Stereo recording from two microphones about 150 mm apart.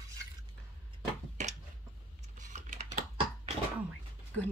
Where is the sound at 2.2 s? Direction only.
55° right (ahead or behind).